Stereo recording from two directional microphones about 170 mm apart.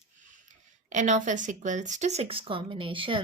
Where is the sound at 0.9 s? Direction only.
45° right (ahead or behind).